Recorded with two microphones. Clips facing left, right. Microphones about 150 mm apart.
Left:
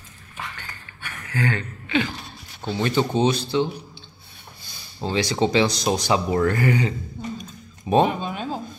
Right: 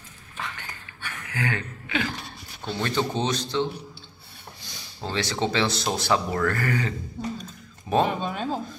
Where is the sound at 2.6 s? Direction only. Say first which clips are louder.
Left 4 dB; 10° left (ahead or behind).